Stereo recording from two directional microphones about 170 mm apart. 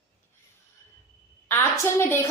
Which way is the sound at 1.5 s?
15° left (ahead or behind).